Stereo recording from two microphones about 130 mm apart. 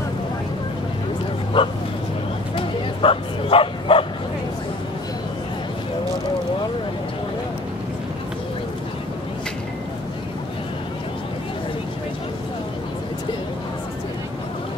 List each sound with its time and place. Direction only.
1.5 s speech: 40° left (ahead or behind)
2.5 s bow-wow: 45° left (ahead or behind)